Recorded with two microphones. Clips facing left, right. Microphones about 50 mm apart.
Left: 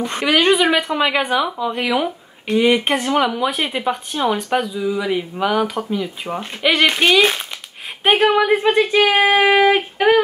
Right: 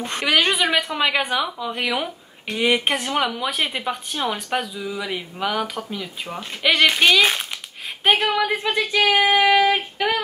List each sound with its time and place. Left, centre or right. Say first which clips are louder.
0.0 s a woman's voice: left 4 dB; centre
8.3 s child singing: left 6 dB; left
9.9 s speech: left 8 dB; left